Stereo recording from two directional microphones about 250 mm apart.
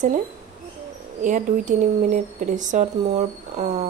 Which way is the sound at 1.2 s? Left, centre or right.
Right.